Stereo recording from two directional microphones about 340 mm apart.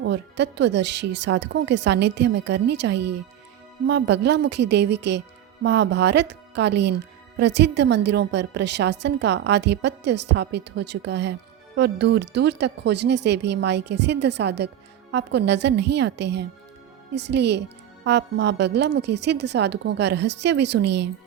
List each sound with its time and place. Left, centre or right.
0.0 s a woman's voice: right